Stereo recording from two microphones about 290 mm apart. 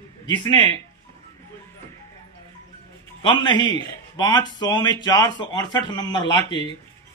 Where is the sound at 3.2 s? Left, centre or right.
Centre.